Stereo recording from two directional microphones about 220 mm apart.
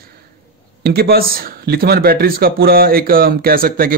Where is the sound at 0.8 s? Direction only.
45° right (ahead or behind).